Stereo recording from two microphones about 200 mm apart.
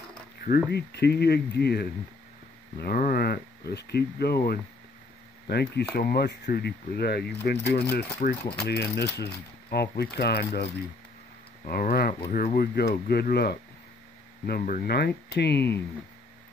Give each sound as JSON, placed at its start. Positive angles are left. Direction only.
{"t": 0.7, "sound": "speech", "side_deg": 55}